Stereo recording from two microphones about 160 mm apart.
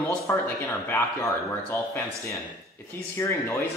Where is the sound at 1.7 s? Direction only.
15° left (ahead or behind).